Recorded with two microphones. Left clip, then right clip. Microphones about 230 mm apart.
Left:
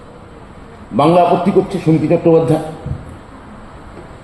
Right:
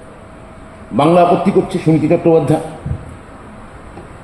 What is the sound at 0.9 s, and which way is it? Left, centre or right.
A man's voice, right.